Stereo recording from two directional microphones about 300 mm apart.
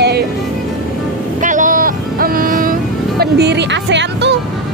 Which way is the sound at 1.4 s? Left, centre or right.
Right.